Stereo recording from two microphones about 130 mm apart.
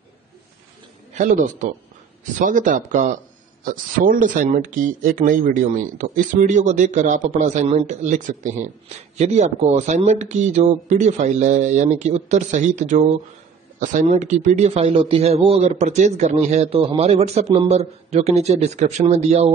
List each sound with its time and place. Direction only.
1.1 s speech: 70° right (ahead or behind)
2.3 s speech: 90° right
3.6 s speech: 90° right
8.8 s a man's voice: 60° right (ahead or behind)